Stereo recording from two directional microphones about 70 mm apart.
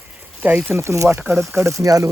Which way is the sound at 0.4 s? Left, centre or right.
Right.